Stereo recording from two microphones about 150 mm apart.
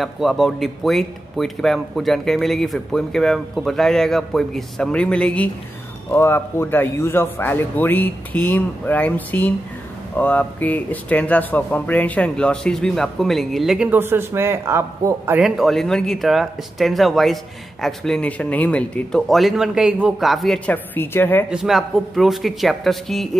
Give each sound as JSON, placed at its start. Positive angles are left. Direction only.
{"t": 0.0, "sound": "speech", "side_deg": 0}
{"t": 13.8, "sound": "a man's voice", "side_deg": -15}
{"t": 15.4, "sound": "speech", "side_deg": 0}
{"t": 21.5, "sound": "speech", "side_deg": -5}